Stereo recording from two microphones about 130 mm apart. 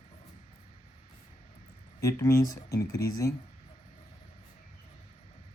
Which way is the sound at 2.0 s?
25° left (ahead or behind).